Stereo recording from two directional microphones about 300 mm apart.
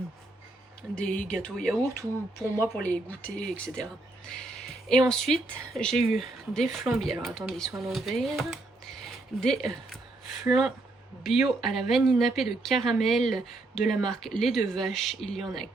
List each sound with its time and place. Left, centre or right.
0.9 s speech: left
1.6 s speech: centre